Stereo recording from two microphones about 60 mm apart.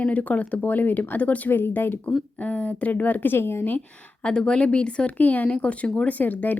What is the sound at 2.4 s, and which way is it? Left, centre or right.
Speech, left.